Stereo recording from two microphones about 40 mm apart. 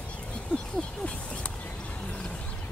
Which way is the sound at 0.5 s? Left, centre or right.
Left.